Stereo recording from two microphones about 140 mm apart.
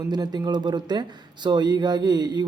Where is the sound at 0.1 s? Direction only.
30° right (ahead or behind).